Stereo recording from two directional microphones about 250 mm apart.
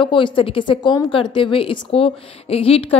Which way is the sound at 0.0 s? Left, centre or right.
Centre.